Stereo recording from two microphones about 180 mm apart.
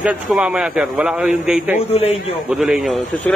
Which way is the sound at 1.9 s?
35° left (ahead or behind).